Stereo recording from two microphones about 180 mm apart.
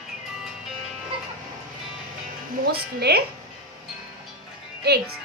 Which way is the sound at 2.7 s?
60° right (ahead or behind).